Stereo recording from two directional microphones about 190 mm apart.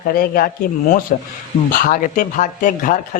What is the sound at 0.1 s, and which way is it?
Speech, 50° left (ahead or behind).